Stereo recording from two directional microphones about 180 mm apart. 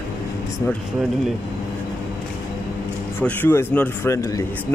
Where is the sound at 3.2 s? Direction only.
10° left (ahead or behind).